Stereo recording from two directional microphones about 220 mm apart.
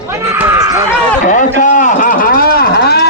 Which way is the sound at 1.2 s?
35° left (ahead or behind).